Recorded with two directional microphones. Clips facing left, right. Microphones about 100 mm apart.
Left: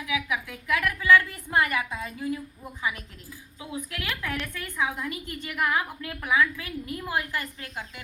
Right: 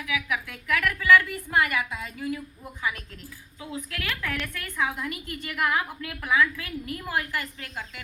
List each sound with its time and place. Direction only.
0.0 s a woman's voice: 20° left (ahead or behind)
3.6 s a woman's voice: 15° left (ahead or behind)